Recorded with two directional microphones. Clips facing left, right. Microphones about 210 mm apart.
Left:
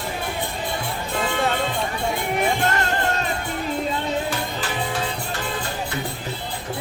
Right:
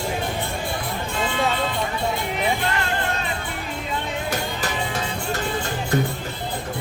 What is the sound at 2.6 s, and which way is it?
Music, 45° left (ahead or behind).